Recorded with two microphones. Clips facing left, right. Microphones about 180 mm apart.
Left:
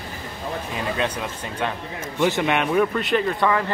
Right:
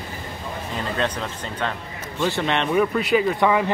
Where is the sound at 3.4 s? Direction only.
15° right (ahead or behind).